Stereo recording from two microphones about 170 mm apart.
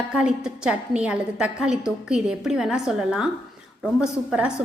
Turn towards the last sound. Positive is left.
turn(degrees=-5)  # may be behind; listen again after turning